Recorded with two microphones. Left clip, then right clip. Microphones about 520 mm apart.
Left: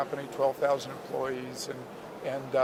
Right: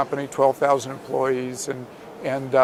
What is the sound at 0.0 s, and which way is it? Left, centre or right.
Speech, right.